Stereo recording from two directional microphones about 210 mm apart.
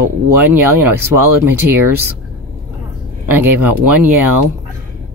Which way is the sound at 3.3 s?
10° right (ahead or behind).